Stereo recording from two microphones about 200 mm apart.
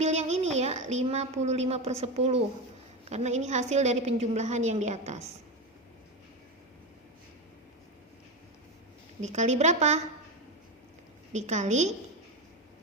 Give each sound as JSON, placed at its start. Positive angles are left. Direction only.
{"t": 0.0, "sound": "a sound", "side_deg": -35}
{"t": 3.1, "sound": "a woman's voice", "side_deg": -35}
{"t": 9.2, "sound": "a woman's voice", "side_deg": -35}
{"t": 11.3, "sound": "a woman's voice", "side_deg": -35}